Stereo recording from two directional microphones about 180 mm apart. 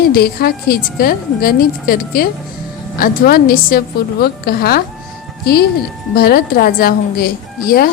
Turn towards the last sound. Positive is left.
turn(degrees=55)  # may be behind; listen again after turning